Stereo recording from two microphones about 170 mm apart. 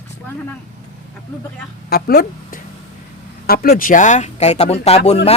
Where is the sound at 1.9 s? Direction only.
70° left (ahead or behind).